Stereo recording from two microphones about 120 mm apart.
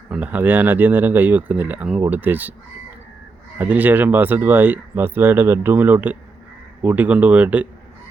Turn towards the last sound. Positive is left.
turn(degrees=-15)  # may be behind; listen again after turning